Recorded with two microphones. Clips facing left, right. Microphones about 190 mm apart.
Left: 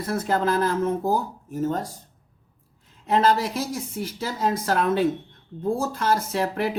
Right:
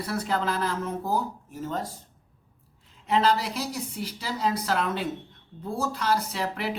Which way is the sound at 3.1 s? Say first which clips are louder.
Left 3 dB; 45° left (ahead or behind).